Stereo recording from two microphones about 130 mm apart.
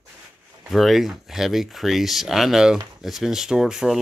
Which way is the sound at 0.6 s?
Centre (ahead or behind).